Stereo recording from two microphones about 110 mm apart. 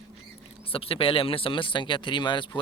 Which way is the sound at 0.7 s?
55° left (ahead or behind).